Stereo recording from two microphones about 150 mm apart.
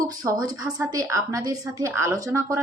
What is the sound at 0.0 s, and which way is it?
A woman's voice, 25° right (ahead or behind).